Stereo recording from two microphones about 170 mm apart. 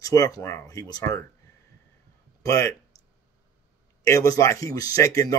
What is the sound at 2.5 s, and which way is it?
Speech, 20° left (ahead or behind).